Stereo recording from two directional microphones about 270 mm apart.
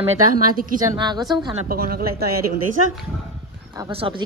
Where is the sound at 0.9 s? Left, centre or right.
Centre.